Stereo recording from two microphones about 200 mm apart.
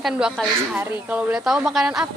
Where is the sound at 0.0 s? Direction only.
Centre (ahead or behind).